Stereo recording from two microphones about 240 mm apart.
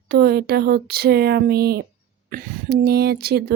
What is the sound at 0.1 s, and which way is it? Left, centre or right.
Speech, right.